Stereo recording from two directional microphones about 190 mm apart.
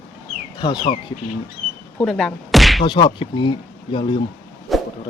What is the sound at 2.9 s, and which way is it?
Speech, 25° left (ahead or behind).